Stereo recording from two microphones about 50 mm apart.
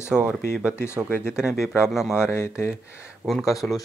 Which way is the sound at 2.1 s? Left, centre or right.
Left.